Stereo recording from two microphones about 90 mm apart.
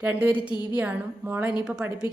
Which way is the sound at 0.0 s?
20° right (ahead or behind).